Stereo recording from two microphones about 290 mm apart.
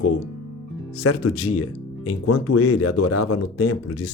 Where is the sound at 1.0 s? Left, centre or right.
Left.